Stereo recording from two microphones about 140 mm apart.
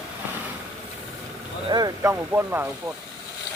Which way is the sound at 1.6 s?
30° right (ahead or behind).